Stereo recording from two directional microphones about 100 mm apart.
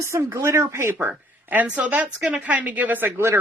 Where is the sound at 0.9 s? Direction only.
15° right (ahead or behind).